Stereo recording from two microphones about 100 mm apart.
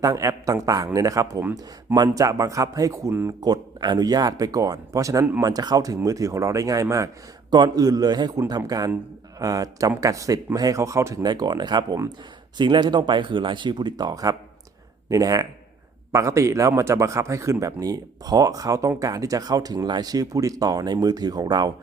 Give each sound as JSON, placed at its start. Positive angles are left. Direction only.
{"t": 0.0, "sound": "speech", "side_deg": -35}
{"t": 3.4, "sound": "speech", "side_deg": -45}